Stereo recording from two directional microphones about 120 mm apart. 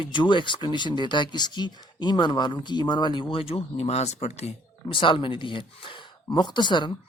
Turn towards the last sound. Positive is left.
turn(degrees=40)  # may be behind; listen again after turning